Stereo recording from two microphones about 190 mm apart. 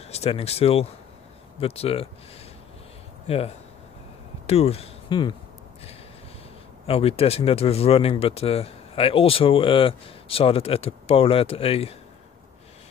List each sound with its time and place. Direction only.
0.0 s speech: 35° left (ahead or behind)
3.3 s speech: 30° left (ahead or behind)
6.9 s speech: 30° left (ahead or behind)